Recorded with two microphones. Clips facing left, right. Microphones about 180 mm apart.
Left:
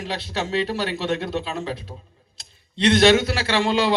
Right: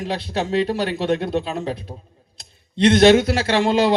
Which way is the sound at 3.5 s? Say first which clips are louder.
Right 3 dB; 50° right (ahead or behind).